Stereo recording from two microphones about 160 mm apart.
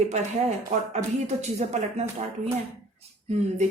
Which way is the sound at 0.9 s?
45° right (ahead or behind).